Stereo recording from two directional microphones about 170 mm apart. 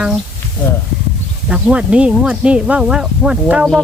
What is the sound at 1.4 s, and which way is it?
Speech, 5° right (ahead or behind).